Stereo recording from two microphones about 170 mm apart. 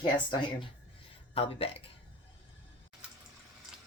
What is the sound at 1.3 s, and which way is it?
Speech, 35° left (ahead or behind).